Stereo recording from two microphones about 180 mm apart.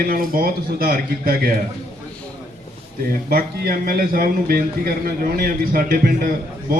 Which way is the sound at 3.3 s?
55° right (ahead or behind).